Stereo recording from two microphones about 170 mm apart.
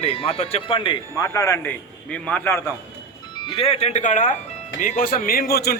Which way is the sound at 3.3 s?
30° left (ahead or behind).